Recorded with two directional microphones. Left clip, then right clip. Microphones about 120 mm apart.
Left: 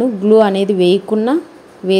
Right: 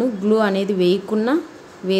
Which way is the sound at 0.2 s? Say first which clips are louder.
Left 9 dB; 30° left (ahead or behind).